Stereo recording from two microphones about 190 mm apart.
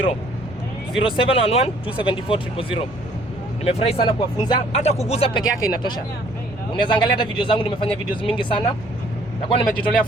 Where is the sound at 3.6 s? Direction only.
30° left (ahead or behind).